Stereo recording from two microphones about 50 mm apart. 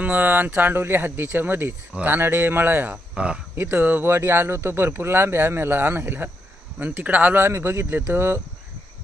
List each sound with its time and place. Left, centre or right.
0.0 s speech: right
3.2 s speech: right
3.5 s speech: right
4.0 s speech: right
7.5 s speech: right